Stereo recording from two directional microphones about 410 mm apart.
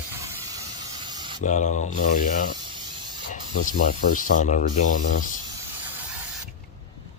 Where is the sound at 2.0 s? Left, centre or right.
Centre.